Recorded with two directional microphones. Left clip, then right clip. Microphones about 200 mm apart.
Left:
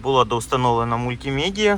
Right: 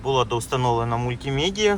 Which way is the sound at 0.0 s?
10° right (ahead or behind).